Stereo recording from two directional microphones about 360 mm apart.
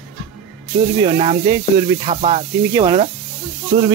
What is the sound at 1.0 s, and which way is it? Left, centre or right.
Speech, centre.